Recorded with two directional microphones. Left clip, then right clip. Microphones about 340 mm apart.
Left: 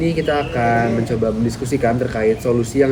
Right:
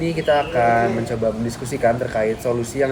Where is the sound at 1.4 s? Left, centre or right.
Centre.